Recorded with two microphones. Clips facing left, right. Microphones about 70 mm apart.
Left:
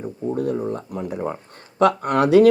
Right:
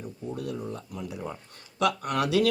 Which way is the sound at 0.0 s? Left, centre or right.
Left.